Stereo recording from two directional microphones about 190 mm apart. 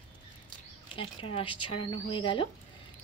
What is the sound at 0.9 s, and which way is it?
Speech, 30° left (ahead or behind).